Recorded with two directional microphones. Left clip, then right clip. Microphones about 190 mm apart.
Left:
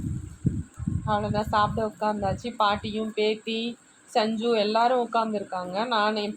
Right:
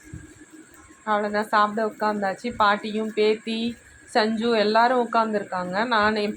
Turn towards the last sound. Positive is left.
turn(degrees=-20)  # may be behind; listen again after turning